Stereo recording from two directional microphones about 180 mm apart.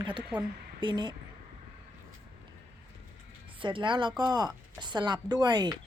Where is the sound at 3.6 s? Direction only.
30° right (ahead or behind).